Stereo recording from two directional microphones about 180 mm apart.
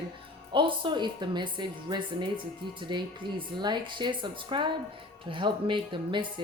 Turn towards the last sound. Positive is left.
turn(degrees=-25)  # may be behind; listen again after turning